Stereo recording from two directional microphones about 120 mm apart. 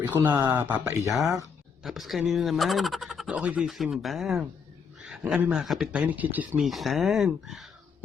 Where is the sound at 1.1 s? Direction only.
Centre (ahead or behind).